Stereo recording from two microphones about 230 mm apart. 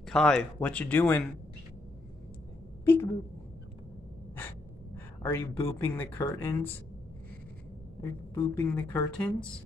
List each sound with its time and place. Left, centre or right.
0.0 s speech: centre
2.8 s a sound: centre
4.4 s speech: centre
8.0 s a woman's voice: centre